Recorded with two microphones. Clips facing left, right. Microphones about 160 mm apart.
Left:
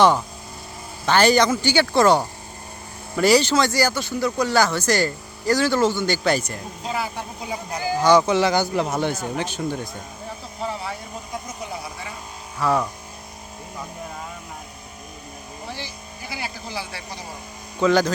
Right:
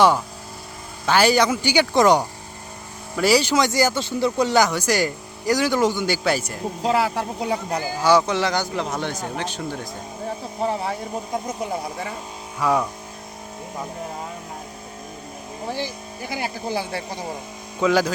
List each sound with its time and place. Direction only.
1.0 s speech: 10° right (ahead or behind)
6.8 s speech: 80° right
8.0 s speech: centre (ahead or behind)
10.6 s speech: 50° right (ahead or behind)
12.5 s speech: 10° right (ahead or behind)
15.6 s speech: 50° right (ahead or behind)
17.7 s speech: 5° right (ahead or behind)